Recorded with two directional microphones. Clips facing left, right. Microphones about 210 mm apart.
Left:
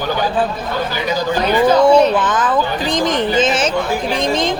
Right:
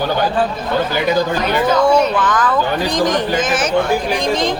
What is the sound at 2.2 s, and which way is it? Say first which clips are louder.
A woman's voice: even; 20° left (ahead or behind).